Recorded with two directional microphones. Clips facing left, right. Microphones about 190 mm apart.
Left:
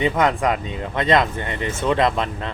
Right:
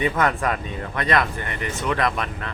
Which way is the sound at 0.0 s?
20° left (ahead or behind).